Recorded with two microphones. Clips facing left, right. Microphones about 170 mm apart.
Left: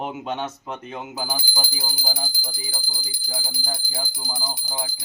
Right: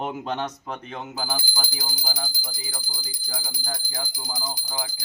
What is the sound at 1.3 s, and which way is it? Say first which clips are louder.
Speech: left 1 dB; 10° left (ahead or behind).